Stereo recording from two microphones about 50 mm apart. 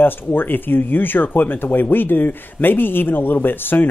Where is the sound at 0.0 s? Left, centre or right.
Left.